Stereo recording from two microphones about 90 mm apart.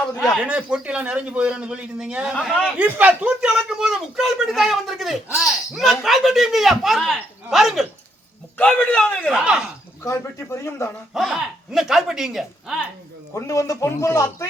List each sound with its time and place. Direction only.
0.2 s speech: centre (ahead or behind)
0.4 s speech: 10° right (ahead or behind)
2.3 s a man's voice: 10° left (ahead or behind)
2.7 s speech: 15° right (ahead or behind)
8.5 s a man's voice: 15° left (ahead or behind)
9.3 s speech: 10° right (ahead or behind)
10.0 s a man's voice: 35° left (ahead or behind)
11.1 s speech: 5° right (ahead or behind)
13.3 s a man's voice: 35° left (ahead or behind)